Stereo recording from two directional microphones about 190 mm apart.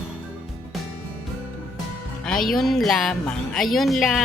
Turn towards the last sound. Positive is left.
turn(degrees=0)  # may be behind; listen again after turning